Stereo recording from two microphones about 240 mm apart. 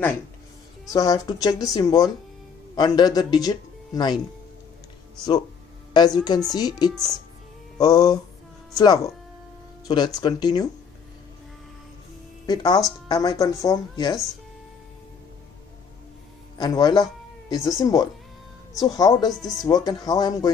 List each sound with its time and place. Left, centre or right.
0.9 s speech: centre
5.9 s speech: centre
7.7 s music: centre
8.7 s speech: centre
12.4 s speech: centre
16.5 s speech: centre